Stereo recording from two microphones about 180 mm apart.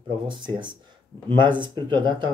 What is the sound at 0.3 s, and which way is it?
Speech, 25° right (ahead or behind).